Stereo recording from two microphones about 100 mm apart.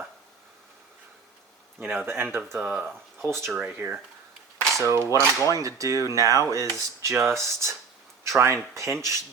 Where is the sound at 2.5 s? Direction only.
10° right (ahead or behind).